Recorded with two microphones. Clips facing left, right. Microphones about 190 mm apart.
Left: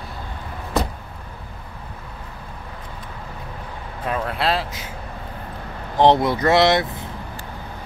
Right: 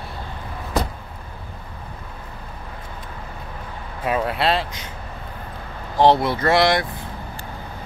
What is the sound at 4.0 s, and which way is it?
Speech, 5° right (ahead or behind).